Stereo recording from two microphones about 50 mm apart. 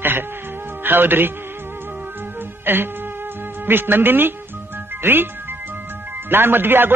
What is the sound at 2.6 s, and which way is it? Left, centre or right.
A man's voice, right.